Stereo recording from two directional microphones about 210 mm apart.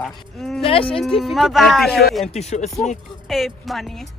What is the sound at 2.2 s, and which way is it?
Speech, 30° left (ahead or behind).